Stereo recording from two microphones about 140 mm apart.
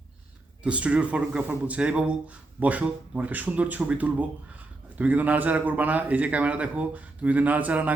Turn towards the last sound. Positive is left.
turn(degrees=-10)  # may be behind; listen again after turning